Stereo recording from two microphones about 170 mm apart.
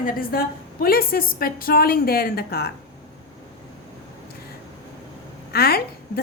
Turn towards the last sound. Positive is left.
turn(degrees=65)  # may be behind; listen again after turning